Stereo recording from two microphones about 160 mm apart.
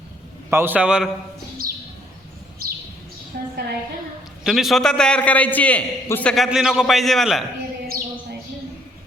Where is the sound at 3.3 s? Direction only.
70° right (ahead or behind).